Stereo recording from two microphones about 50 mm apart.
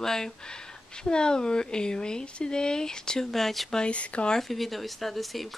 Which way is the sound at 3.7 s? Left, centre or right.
Left.